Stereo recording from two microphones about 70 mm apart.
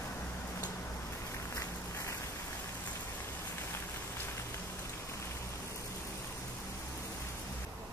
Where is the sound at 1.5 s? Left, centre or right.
Left.